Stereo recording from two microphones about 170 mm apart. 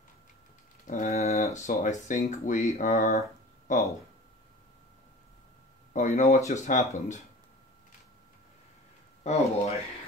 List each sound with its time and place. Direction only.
0.8 s speech: 50° left (ahead or behind)
5.9 s speech: 45° left (ahead or behind)
9.2 s speech: 40° left (ahead or behind)